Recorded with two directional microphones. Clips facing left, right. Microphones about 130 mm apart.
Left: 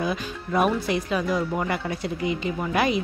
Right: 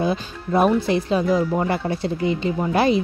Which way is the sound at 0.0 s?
30° right (ahead or behind).